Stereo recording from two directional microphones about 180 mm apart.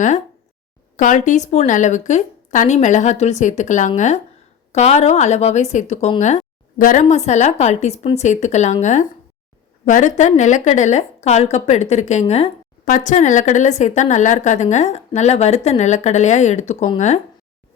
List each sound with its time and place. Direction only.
0.9 s a woman's voice: 45° left (ahead or behind)